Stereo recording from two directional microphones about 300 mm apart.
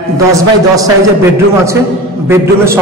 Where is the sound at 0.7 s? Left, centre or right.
Centre.